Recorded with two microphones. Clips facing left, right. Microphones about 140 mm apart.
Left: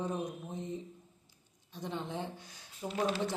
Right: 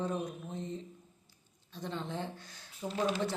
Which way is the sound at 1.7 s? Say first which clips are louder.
Even; 15° left (ahead or behind).